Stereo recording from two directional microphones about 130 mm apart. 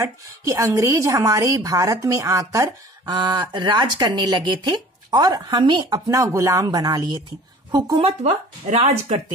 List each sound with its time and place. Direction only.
0.0 s a woman's voice: 25° right (ahead or behind)
8.0 s speech: 50° right (ahead or behind)